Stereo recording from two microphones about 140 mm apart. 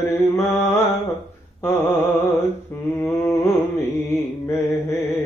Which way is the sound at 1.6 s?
15° left (ahead or behind).